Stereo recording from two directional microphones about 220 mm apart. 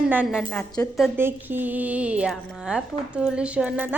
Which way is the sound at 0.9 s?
5° right (ahead or behind).